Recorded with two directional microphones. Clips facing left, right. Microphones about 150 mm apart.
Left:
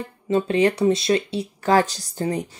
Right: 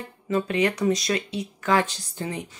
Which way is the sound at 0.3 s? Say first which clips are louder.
Left 4 dB; 30° left (ahead or behind).